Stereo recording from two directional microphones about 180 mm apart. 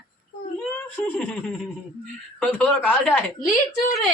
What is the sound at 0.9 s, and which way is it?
Speech, 10° left (ahead or behind).